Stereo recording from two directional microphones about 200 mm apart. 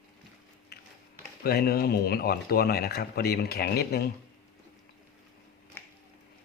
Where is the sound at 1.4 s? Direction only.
50° left (ahead or behind).